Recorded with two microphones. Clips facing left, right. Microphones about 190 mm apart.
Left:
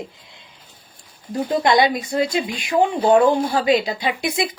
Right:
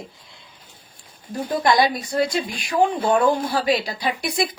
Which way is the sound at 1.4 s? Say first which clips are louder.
Left 2 dB; 25° left (ahead or behind).